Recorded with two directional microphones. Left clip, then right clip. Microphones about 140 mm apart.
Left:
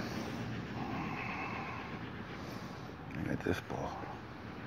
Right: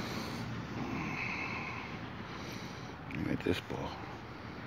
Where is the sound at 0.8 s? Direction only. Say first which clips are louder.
Right 2 dB; 40° right (ahead or behind).